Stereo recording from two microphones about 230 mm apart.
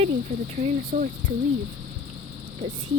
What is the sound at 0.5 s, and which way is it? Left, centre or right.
Speech, right.